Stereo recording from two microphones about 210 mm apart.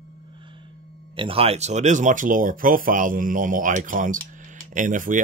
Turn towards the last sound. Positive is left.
turn(degrees=-40)  # may be behind; listen again after turning